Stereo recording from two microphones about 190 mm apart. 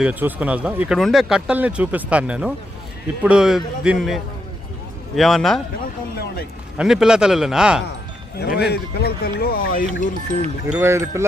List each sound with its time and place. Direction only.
0.0 s a man's voice: 10° right (ahead or behind)
6.7 s a man's voice: 5° right (ahead or behind)
8.4 s speech: 60° left (ahead or behind)
10.7 s speech: 10° right (ahead or behind)